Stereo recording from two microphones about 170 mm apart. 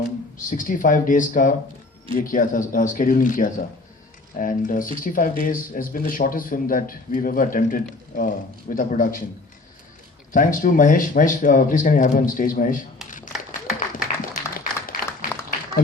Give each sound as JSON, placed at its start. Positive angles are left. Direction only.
{"t": 0.3, "sound": "a man's voice", "side_deg": 50}
{"t": 10.3, "sound": "speech", "side_deg": 55}
{"t": 13.7, "sound": "applause", "side_deg": 55}